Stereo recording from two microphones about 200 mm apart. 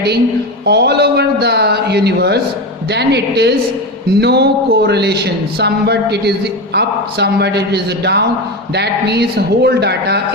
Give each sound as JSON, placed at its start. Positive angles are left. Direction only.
{"t": 0.6, "sound": "a woman's voice", "side_deg": -55}